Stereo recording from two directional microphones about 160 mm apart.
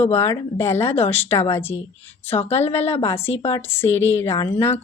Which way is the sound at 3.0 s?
15° left (ahead or behind).